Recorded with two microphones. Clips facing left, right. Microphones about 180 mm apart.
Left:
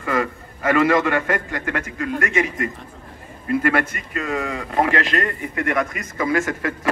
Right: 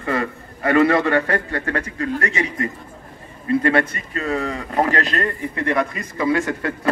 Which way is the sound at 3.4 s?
30° right (ahead or behind).